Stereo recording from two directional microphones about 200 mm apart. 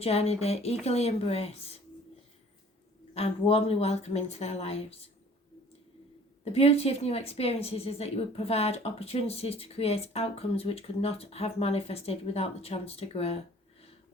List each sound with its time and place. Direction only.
0.0 s speech: 30° left (ahead or behind)
3.2 s speech: 30° left (ahead or behind)
6.4 s a woman's voice: 30° left (ahead or behind)